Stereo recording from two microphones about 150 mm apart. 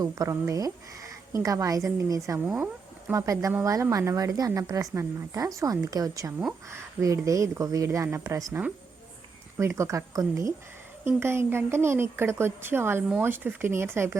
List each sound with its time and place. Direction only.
0.0 s a woman's voice: 20° right (ahead or behind)
9.6 s a woman's voice: 20° right (ahead or behind)